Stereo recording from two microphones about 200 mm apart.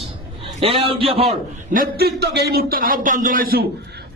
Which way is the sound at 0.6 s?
30° right (ahead or behind).